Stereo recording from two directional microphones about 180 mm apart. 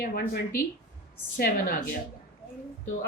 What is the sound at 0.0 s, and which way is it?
A woman's voice, 60° left (ahead or behind).